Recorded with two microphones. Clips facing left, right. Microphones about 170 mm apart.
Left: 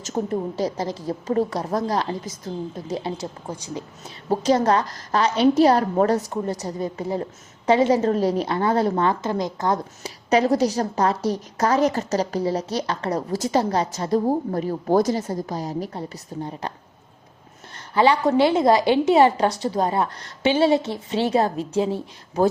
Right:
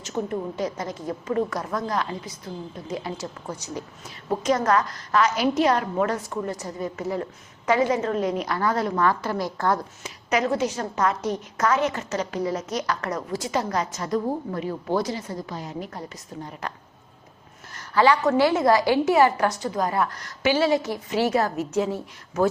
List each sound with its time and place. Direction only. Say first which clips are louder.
0.0 s a woman's voice: left 3 dB; 35° left (ahead or behind); by 9.8 s 20° left (ahead or behind)
10.0 s a woman's voice: left 5 dB; 30° left (ahead or behind)
17.7 s a sound: left 1 dB; 25° left (ahead or behind)
18.3 s a woman's voice: left 2 dB; 25° left (ahead or behind)